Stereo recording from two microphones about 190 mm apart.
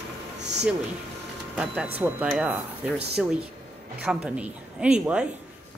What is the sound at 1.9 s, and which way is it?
A woman's voice, 5° right (ahead or behind).